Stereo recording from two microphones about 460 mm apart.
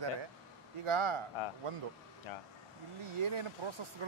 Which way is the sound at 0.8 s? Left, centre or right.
Right.